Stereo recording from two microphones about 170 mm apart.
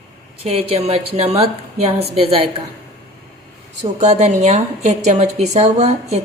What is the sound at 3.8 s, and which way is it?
A woman's voice, 40° right (ahead or behind).